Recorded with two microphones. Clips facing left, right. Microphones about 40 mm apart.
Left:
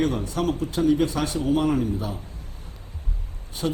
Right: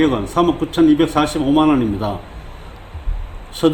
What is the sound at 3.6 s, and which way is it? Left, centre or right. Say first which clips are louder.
Speech: right 11 dB; right.